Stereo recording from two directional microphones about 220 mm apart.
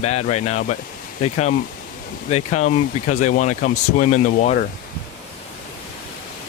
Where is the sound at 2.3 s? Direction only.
30° left (ahead or behind).